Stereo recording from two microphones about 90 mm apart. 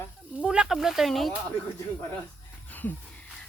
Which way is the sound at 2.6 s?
20° left (ahead or behind).